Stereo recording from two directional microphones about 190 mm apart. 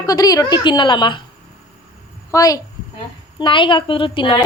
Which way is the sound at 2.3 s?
20° left (ahead or behind).